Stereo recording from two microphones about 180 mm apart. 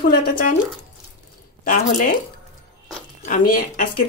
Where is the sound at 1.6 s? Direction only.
50° left (ahead or behind).